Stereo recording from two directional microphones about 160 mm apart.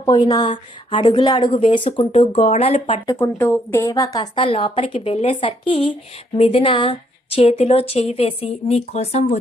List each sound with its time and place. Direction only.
0.0 s a woman's voice: 25° left (ahead or behind)
3.2 s a woman's voice: 15° left (ahead or behind); by 9.4 s 45° left (ahead or behind)